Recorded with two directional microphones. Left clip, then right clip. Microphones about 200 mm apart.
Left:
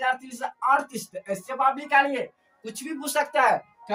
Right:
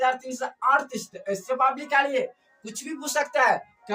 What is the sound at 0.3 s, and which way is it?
Speech, 20° left (ahead or behind).